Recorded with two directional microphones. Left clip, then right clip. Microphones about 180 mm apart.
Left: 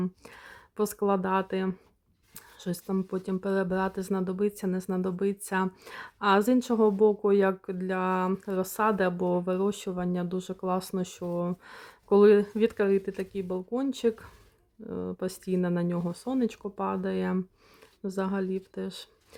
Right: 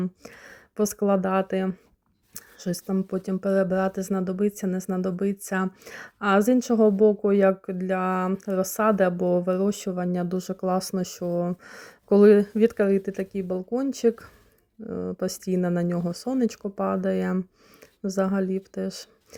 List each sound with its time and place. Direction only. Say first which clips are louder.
0.0 s speech: right 2 dB; 10° right (ahead or behind)